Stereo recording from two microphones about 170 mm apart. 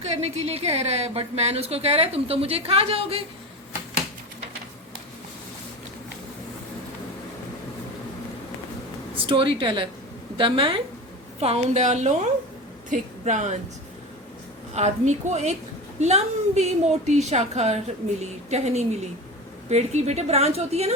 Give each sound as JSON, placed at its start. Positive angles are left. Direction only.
{"t": 0.3, "sound": "a woman's voice", "side_deg": -35}
{"t": 9.1, "sound": "a woman's voice", "side_deg": -30}
{"t": 14.8, "sound": "a woman's voice", "side_deg": -40}